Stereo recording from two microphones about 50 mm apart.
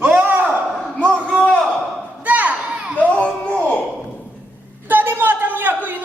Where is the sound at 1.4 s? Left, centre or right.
Centre.